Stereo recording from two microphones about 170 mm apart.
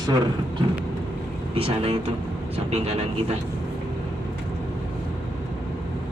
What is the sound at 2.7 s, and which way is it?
Speech, 40° right (ahead or behind).